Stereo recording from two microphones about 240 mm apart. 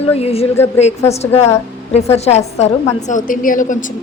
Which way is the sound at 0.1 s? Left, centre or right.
Left.